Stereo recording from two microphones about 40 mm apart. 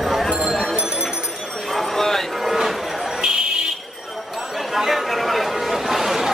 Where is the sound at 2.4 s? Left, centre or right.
Centre.